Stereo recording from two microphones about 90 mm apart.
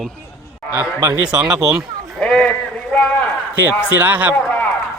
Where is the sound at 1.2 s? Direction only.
10° right (ahead or behind).